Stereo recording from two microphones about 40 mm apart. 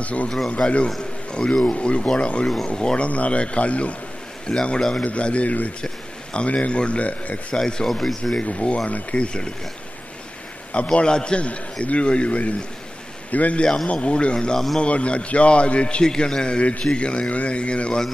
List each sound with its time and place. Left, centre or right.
0.0 s speech: left
0.6 s a man's voice: centre; by 3.9 s left
4.5 s a man's voice: left
5.0 s speech: left
7.5 s speech: centre
8.4 s a man's voice: left
10.7 s a man's voice: left
13.9 s a man's voice: left